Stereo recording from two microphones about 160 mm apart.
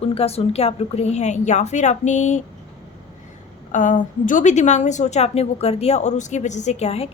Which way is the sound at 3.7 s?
50° left (ahead or behind).